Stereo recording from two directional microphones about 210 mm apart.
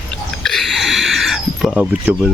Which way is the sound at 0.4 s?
Centre (ahead or behind).